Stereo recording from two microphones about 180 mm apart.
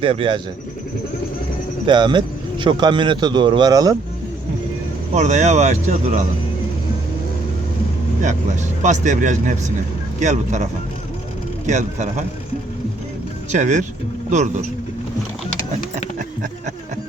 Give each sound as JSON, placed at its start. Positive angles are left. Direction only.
{"t": 0.0, "sound": "a man's voice", "side_deg": -30}
{"t": 1.9, "sound": "a man's voice", "side_deg": -25}
{"t": 5.1, "sound": "speech", "side_deg": -40}
{"t": 8.2, "sound": "speech", "side_deg": -40}
{"t": 13.5, "sound": "speech", "side_deg": -40}
{"t": 16.1, "sound": "a sound", "side_deg": -45}